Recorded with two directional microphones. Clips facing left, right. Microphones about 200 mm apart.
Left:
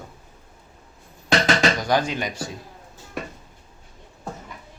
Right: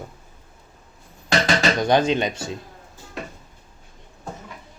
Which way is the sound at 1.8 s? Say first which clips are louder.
Right 4 dB; 25° right (ahead or behind).